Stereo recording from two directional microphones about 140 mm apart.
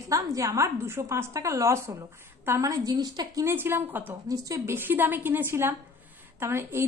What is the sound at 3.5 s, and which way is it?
A woman's voice, 15° right (ahead or behind).